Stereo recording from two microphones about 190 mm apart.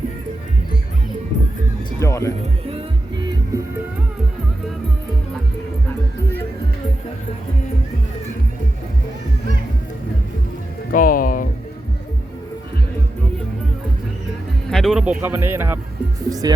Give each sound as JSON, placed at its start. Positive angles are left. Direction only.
{"t": 2.0, "sound": "speech", "side_deg": 15}
{"t": 2.4, "sound": "music", "side_deg": -30}
{"t": 10.9, "sound": "music", "side_deg": 45}
{"t": 14.7, "sound": "speech", "side_deg": 0}